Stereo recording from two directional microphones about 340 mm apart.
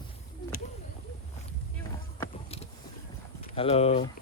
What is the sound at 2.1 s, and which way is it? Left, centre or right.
Vehicle, centre.